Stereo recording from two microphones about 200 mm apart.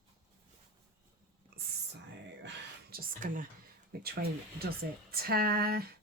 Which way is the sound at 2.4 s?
50° right (ahead or behind).